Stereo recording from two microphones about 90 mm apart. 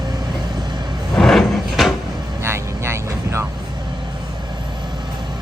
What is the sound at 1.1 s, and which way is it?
Drawer open or close, 5° left (ahead or behind).